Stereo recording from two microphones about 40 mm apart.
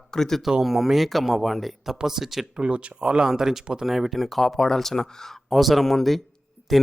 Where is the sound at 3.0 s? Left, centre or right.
Centre.